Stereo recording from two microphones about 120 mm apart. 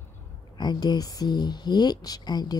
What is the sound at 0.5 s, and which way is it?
A woman's voice, 35° left (ahead or behind).